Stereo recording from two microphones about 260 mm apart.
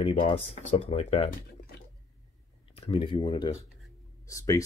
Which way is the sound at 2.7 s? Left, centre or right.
Left.